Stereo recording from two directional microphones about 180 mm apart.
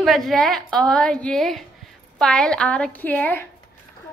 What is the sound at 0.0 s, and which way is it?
Speech, centre (ahead or behind).